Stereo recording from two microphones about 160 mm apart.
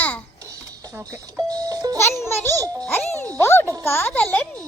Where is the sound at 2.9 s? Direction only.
15° left (ahead or behind).